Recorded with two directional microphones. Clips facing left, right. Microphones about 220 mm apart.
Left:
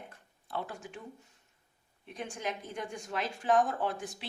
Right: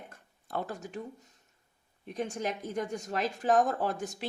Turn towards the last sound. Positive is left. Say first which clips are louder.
# right 2 dB
turn(degrees=-40)  # may be behind; listen again after turning